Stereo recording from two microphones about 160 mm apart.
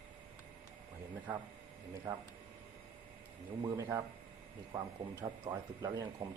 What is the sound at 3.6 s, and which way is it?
Speech, 20° right (ahead or behind).